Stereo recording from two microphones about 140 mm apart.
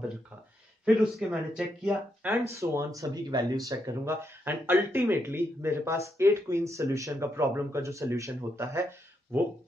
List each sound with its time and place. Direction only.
0.8 s speech: 5° right (ahead or behind)
2.5 s speech: 20° right (ahead or behind)